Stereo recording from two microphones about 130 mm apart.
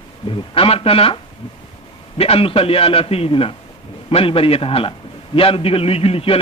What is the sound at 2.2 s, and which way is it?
A man's voice, 45° left (ahead or behind).